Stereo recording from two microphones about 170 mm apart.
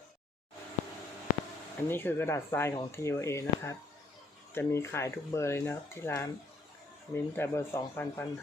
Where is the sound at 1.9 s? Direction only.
15° left (ahead or behind).